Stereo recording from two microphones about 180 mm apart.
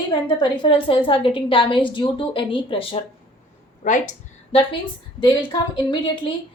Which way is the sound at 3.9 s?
45° left (ahead or behind).